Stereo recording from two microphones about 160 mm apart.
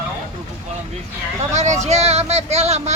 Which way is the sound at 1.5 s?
45° right (ahead or behind).